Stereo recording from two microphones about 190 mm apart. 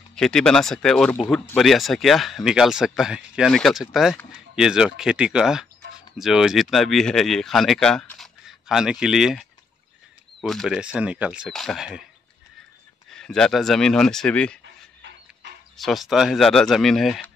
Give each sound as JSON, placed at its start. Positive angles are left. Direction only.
{"t": 0.1, "sound": "speech", "side_deg": 5}
{"t": 13.1, "sound": "speech", "side_deg": 5}
{"t": 15.0, "sound": "a sound", "side_deg": -70}
{"t": 15.8, "sound": "speech", "side_deg": 0}